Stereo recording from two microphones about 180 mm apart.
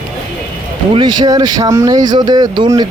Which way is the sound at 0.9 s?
25° right (ahead or behind).